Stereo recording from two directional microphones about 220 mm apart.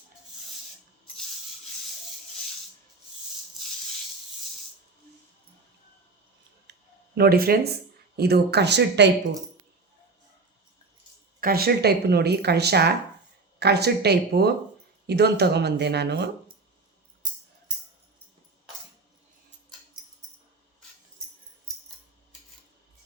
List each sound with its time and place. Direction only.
6.7 s a sound: 50° right (ahead or behind)
7.2 s speech: 45° right (ahead or behind)
11.3 s speech: 40° right (ahead or behind)